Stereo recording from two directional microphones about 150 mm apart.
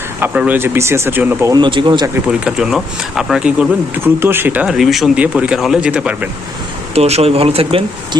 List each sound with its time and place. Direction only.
0.2 s speech: 10° right (ahead or behind)
1.5 s speech: 30° right (ahead or behind)
2.4 s speech: 5° right (ahead or behind)
6.9 s speech: 45° right (ahead or behind)